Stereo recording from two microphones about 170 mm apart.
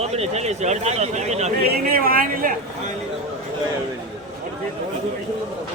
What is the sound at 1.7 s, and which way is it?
Speech, 60° right (ahead or behind).